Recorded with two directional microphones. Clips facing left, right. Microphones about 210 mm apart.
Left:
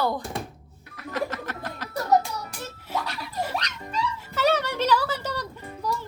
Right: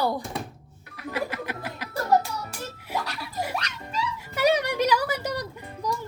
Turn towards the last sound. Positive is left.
turn(degrees=-15)  # may be behind; listen again after turning